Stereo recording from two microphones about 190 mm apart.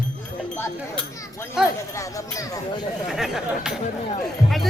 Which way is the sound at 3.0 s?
Centre (ahead or behind).